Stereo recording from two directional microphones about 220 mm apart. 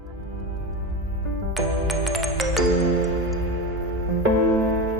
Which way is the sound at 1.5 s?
Centre (ahead or behind).